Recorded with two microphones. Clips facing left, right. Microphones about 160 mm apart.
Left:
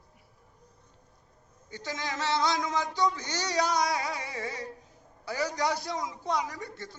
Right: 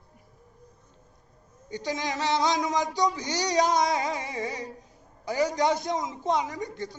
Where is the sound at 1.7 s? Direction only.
15° right (ahead or behind).